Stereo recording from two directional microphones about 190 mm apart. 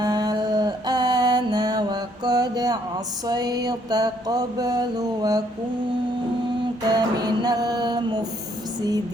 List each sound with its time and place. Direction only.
0.0 s mantra: 20° right (ahead or behind)
6.9 s mantra: 20° right (ahead or behind)